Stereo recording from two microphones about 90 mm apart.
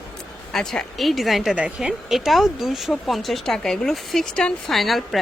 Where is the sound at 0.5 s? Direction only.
5° left (ahead or behind).